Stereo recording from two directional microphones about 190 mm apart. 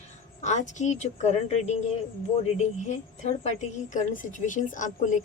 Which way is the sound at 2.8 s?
35° left (ahead or behind).